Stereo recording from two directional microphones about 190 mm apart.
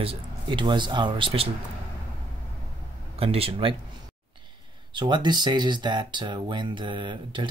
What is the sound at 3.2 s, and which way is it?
Speech, 30° right (ahead or behind).